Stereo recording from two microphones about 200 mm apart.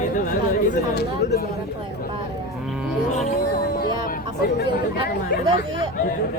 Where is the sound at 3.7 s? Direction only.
50° left (ahead or behind).